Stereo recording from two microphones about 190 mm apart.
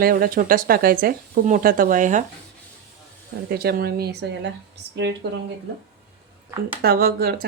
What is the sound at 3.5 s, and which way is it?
Speech, 55° right (ahead or behind).